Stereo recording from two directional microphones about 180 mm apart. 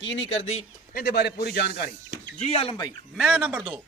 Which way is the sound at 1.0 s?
65° left (ahead or behind).